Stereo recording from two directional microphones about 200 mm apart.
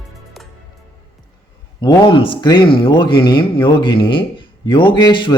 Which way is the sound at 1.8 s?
20° left (ahead or behind).